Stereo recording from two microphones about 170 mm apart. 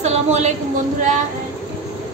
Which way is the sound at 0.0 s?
40° right (ahead or behind).